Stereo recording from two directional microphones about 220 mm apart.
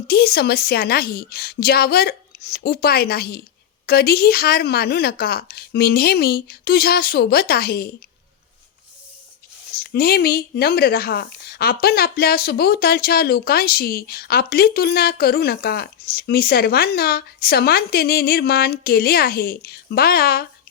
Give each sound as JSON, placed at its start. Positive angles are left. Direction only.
{"t": 0.1, "sound": "speech", "side_deg": 45}
{"t": 9.7, "sound": "speech", "side_deg": 45}